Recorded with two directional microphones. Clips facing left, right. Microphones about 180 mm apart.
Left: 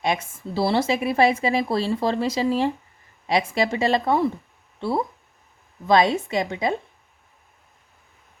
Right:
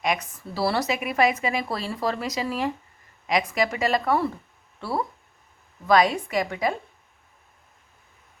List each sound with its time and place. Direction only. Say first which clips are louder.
0.0 s speech: left 2 dB; 30° left (ahead or behind)